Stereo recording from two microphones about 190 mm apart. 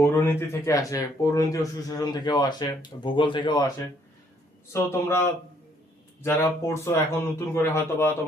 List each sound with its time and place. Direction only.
0.0 s speech: 10° left (ahead or behind)
4.7 s speech: 15° left (ahead or behind)